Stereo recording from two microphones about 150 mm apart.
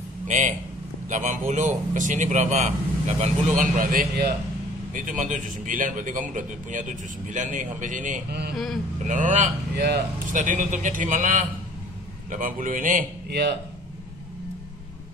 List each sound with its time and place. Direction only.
0.3 s a man's voice: 55° right (ahead or behind); by 4.2 s 80° right
4.9 s a man's voice: 60° right (ahead or behind); by 8.5 s 90° right
9.0 s a man's voice: 55° right (ahead or behind)
9.8 s a man's voice: 75° right (ahead or behind)